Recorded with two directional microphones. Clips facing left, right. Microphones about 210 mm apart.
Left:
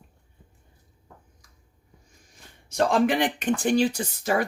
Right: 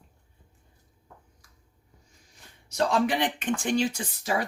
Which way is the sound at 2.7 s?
50° left (ahead or behind).